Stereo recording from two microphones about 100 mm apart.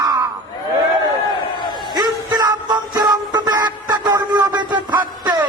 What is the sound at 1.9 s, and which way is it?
Music, 40° right (ahead or behind).